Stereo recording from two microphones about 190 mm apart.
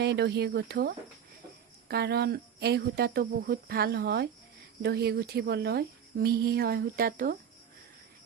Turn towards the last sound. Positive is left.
turn(degrees=-50)  # may be behind; listen again after turning